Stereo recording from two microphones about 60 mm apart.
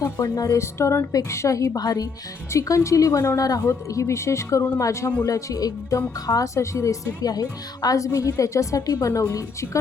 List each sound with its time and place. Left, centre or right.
0.0 s a woman's voice: left
2.5 s a woman's voice: left
5.2 s speech: left
6.2 s speech: left
6.5 s a woman's voice: left